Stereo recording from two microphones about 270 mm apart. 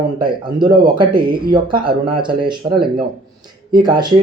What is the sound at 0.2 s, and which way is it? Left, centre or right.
Speech, centre.